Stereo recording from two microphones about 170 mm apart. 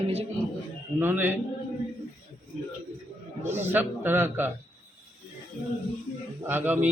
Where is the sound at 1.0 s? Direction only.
10° right (ahead or behind).